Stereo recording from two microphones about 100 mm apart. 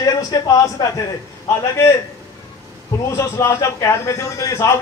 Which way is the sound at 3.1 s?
30° left (ahead or behind).